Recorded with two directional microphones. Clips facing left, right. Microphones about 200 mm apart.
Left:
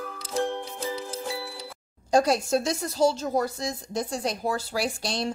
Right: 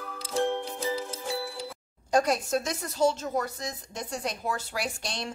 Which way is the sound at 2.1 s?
30° left (ahead or behind).